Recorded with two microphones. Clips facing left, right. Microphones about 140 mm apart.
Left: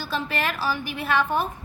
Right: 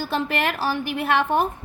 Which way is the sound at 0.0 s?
55° right (ahead or behind).